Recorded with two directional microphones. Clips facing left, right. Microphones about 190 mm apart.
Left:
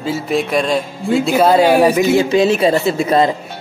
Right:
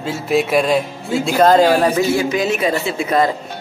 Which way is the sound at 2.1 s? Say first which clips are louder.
Left 5 dB; 25° left (ahead or behind).